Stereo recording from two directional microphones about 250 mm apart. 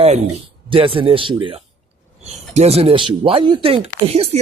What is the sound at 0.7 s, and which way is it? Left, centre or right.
Speech, right.